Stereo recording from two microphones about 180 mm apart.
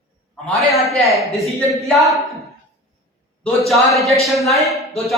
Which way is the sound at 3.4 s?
Centre (ahead or behind).